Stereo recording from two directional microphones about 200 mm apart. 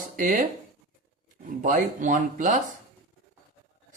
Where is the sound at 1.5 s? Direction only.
40° right (ahead or behind).